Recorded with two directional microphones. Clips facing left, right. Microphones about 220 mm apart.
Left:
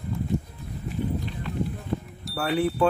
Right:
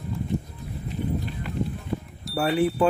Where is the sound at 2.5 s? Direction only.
Centre (ahead or behind).